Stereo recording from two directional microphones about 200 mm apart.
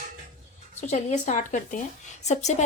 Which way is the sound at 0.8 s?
35° left (ahead or behind).